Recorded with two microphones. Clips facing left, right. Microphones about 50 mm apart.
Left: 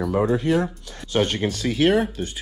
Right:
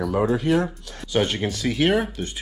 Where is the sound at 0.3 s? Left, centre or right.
Right.